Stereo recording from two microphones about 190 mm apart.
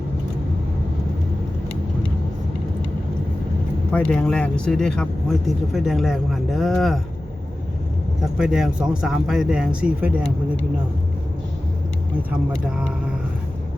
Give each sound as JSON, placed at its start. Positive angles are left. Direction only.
{"t": 3.9, "sound": "speech", "side_deg": 5}
{"t": 8.2, "sound": "speech", "side_deg": 0}